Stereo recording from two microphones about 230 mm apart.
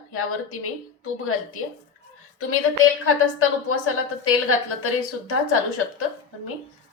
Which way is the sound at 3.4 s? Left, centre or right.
Left.